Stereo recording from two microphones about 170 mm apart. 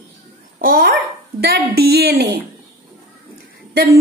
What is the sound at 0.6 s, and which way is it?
A woman's voice, 60° right (ahead or behind).